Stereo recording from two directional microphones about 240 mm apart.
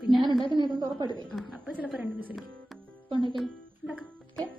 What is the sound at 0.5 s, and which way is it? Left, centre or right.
Speech, centre.